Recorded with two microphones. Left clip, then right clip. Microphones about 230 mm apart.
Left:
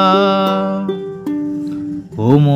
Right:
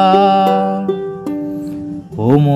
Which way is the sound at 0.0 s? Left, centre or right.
Centre.